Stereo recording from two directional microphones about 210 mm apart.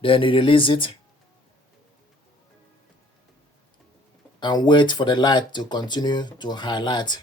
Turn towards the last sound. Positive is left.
turn(degrees=20)  # may be behind; listen again after turning